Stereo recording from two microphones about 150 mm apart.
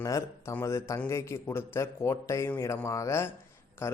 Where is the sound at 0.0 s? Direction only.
20° left (ahead or behind).